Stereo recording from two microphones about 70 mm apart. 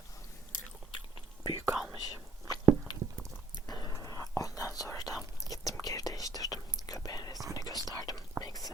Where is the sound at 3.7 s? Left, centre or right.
Left.